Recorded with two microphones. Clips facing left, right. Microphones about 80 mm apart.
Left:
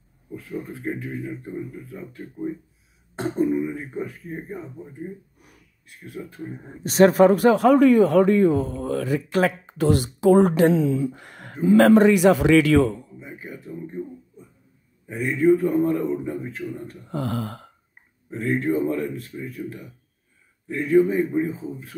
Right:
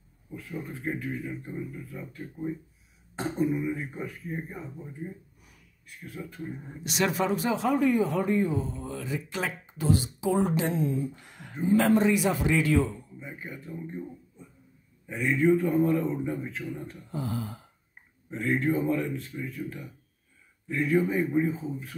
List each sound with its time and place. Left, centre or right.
0.9 s speech: centre
4.3 s speech: centre
6.2 s speech: left
6.6 s speech: left
11.6 s a man's voice: left
13.2 s a man's voice: centre
15.0 s a man's voice: centre
17.1 s speech: left
18.4 s a man's voice: centre; by 21.9 s left